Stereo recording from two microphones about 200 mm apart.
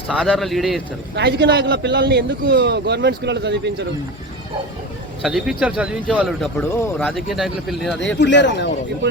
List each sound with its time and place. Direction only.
0.1 s a man's voice: centre (ahead or behind)
1.1 s a man's voice: 60° right (ahead or behind)
5.2 s a man's voice: centre (ahead or behind)
8.2 s a man's voice: 60° left (ahead or behind)